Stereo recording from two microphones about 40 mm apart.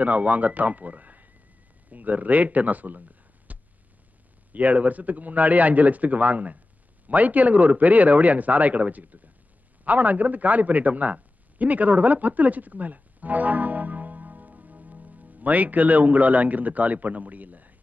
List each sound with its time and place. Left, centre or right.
0.0 s speech: right
3.0 s a sound: right
4.5 s a man's voice: right